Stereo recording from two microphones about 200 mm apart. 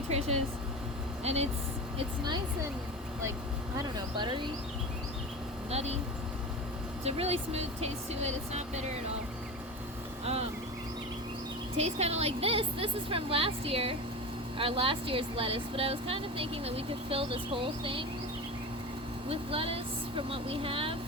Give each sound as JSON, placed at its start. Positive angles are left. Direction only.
{"t": 0.1, "sound": "vehicle", "side_deg": -30}
{"t": 1.2, "sound": "speech", "side_deg": -30}
{"t": 3.8, "sound": "speech", "side_deg": -20}
{"t": 5.7, "sound": "speech", "side_deg": -30}
{"t": 7.0, "sound": "speech", "side_deg": -30}
{"t": 11.8, "sound": "speech", "side_deg": -30}
{"t": 19.3, "sound": "speech", "side_deg": -25}